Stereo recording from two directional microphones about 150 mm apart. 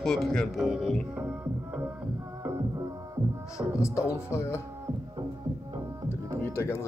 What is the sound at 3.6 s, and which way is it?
Speech, 20° right (ahead or behind).